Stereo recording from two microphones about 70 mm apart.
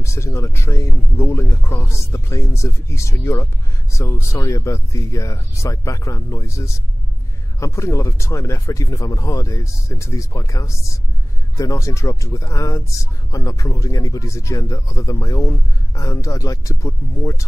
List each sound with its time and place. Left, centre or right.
0.0 s speech: left